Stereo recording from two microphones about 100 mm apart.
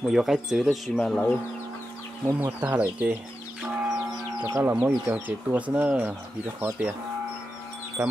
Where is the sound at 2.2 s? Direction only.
25° right (ahead or behind).